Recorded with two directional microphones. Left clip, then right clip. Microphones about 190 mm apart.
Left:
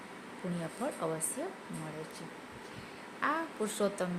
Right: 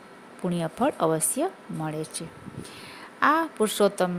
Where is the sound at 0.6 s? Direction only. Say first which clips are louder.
Right 13 dB; 45° right (ahead or behind).